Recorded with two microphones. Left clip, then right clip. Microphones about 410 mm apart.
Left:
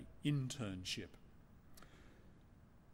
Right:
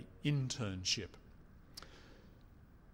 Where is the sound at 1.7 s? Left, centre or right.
Right.